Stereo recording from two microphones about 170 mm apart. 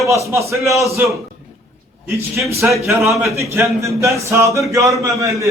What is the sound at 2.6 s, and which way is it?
A man's voice, 10° right (ahead or behind).